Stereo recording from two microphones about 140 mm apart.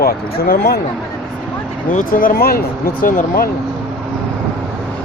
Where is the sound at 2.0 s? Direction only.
85° left.